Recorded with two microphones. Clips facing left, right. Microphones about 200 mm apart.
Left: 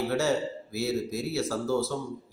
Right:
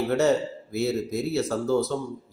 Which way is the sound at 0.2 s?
20° right (ahead or behind).